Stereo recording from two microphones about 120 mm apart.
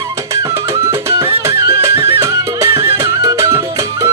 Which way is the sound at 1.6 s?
25° right (ahead or behind).